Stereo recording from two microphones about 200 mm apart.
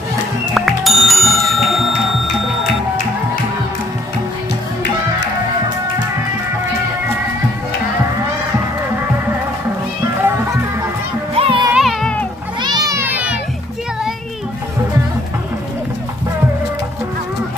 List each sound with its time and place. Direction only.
0.5 s bicycle bell: centre (ahead or behind)
11.3 s music: 25° right (ahead or behind)
11.7 s music: centre (ahead or behind)
12.6 s children playing: 20° right (ahead or behind)